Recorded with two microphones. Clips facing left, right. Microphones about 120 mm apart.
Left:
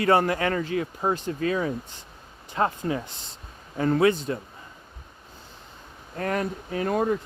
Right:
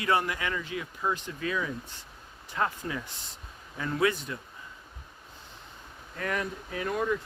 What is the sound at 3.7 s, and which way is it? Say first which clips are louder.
Speech: left 10 dB; 40° left (ahead or behind).